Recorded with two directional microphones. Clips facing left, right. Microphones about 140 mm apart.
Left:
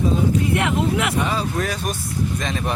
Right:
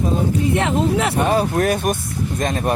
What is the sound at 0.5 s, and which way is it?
Speech, 30° right (ahead or behind).